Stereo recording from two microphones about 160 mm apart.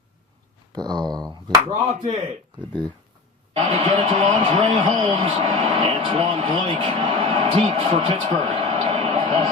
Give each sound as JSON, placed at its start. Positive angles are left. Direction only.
{"t": 0.7, "sound": "speech", "side_deg": -25}
{"t": 1.9, "sound": "a man's voice", "side_deg": -40}
{"t": 3.5, "sound": "a man's voice", "side_deg": -35}
{"t": 5.1, "sound": "speech", "side_deg": -40}